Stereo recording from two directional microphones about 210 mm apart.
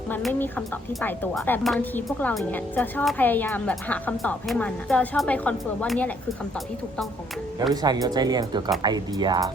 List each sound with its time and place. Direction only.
0.1 s speech: 5° left (ahead or behind)
7.7 s speech: 15° right (ahead or behind)